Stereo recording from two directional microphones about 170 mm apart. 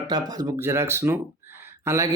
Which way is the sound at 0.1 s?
20° right (ahead or behind).